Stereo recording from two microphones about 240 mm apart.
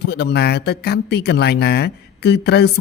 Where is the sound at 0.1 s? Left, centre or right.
Left.